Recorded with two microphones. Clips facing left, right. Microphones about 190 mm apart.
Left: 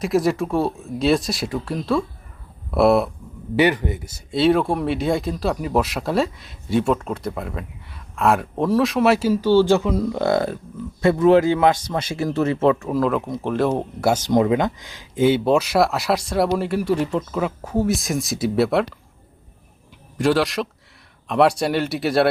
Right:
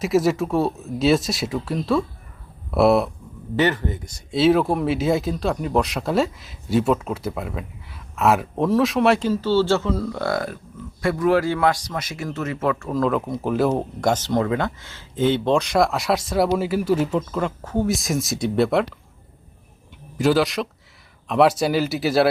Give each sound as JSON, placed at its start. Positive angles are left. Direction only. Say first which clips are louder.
{"t": 0.0, "sound": "speech", "louder": "even", "side_deg": 0}
{"t": 3.5, "sound": "a man's voice", "louder": "left 2 dB", "side_deg": 15}
{"t": 12.8, "sound": "speech", "louder": "left 1 dB", "side_deg": 5}
{"t": 14.1, "sound": "speech", "louder": "left 4 dB", "side_deg": 15}
{"t": 20.1, "sound": "speech", "louder": "even", "side_deg": 0}